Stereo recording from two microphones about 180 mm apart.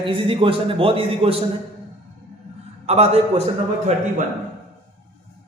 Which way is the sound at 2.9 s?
35° right (ahead or behind).